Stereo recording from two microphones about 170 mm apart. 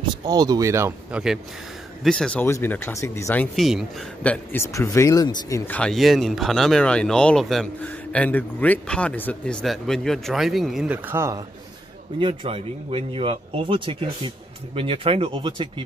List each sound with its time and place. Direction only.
0.1 s speech: 25° right (ahead or behind)
2.0 s speech: 5° left (ahead or behind)
3.5 s speech: centre (ahead or behind); by 5.6 s 20° left (ahead or behind)
5.7 s speech: 5° left (ahead or behind); by 11.4 s 15° right (ahead or behind)
12.2 s speech: 30° right (ahead or behind)